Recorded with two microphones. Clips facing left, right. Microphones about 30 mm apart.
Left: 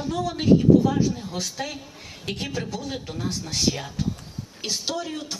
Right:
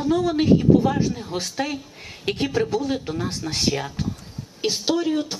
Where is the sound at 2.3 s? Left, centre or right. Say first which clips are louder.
Right 6 dB; right.